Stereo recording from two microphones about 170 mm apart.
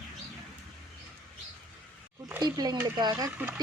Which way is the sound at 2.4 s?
25° right (ahead or behind).